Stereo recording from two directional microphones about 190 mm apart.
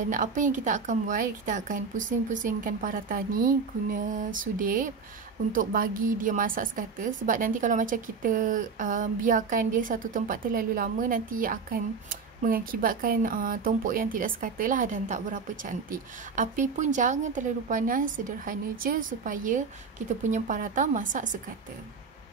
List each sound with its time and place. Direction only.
0.1 s a woman's voice: 40° right (ahead or behind)